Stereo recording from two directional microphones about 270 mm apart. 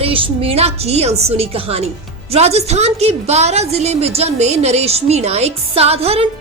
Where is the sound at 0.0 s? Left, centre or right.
Centre.